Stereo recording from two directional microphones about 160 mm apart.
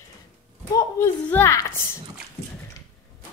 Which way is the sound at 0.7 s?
15° left (ahead or behind).